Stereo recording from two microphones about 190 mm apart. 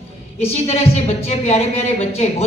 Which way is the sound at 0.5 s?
35° left (ahead or behind).